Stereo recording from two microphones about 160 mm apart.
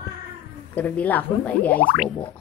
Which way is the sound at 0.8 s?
10° left (ahead or behind).